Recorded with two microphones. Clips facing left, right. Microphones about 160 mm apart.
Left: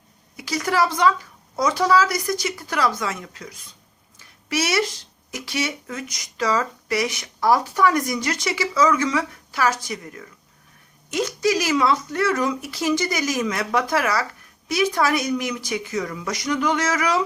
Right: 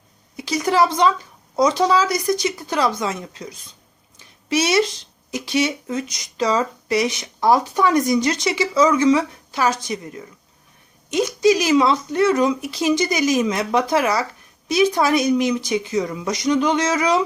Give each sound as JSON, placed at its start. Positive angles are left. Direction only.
{"t": 0.3, "sound": "speech", "side_deg": -20}